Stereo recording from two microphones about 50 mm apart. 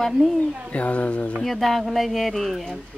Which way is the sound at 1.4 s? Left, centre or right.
Centre.